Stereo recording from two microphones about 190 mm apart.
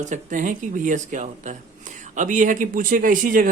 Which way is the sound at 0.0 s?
40° right (ahead or behind).